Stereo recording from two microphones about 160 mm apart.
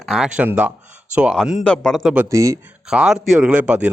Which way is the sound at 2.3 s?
20° right (ahead or behind).